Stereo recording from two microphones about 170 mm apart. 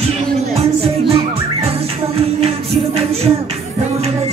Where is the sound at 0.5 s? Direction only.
35° right (ahead or behind).